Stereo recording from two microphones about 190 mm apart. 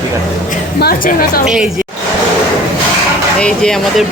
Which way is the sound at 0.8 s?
50° left (ahead or behind).